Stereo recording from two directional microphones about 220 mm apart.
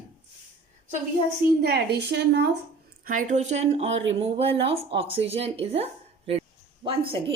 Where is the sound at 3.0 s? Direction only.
35° right (ahead or behind).